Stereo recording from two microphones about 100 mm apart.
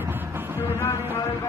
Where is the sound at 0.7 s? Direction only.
25° left (ahead or behind).